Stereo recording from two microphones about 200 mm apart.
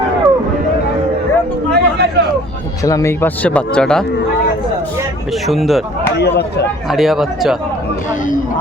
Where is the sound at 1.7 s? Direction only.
55° right (ahead or behind).